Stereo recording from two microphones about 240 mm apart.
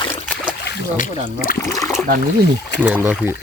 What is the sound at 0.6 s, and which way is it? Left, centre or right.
Speech, left.